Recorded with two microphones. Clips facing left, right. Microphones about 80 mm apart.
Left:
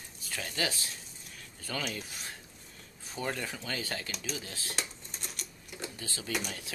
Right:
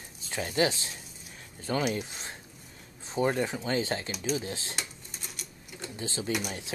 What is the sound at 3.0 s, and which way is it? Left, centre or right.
Speech, right.